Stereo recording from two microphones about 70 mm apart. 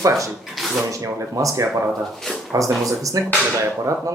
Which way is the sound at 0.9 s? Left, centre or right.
Right.